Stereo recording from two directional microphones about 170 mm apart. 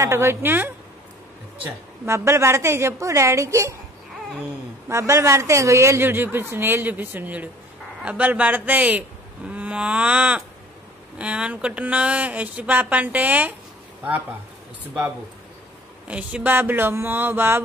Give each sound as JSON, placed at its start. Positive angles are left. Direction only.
{"t": 0.0, "sound": "a woman's voice", "side_deg": -15}
{"t": 2.0, "sound": "a woman's voice", "side_deg": -15}
{"t": 4.8, "sound": "a woman's voice", "side_deg": -15}
{"t": 16.1, "sound": "a woman's voice", "side_deg": -10}